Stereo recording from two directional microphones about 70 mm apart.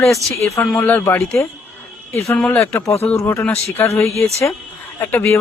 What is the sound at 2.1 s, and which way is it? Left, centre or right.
Speech, left.